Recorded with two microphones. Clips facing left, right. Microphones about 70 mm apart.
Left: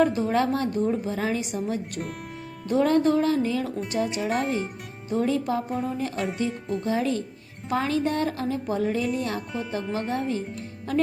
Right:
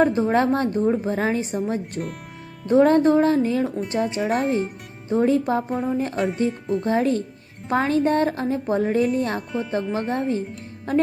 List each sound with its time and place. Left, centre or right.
0.0 s a woman's voice: right
4.3 s speech: centre
5.0 s a woman's voice: right
5.7 s speech: centre
6.0 s a woman's voice: right
6.5 s speech: centre
6.8 s a woman's voice: right